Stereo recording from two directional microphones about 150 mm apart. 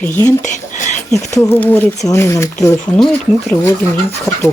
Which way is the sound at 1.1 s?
20° left (ahead or behind).